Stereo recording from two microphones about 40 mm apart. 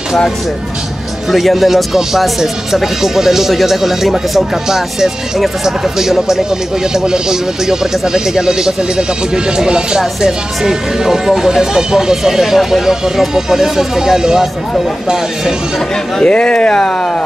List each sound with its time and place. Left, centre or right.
1.3 s speech: centre
16.3 s speech: left